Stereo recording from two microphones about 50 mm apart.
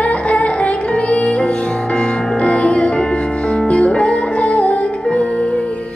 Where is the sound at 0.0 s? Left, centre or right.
Left.